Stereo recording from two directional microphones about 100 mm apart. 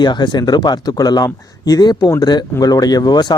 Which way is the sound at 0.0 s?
45° left (ahead or behind).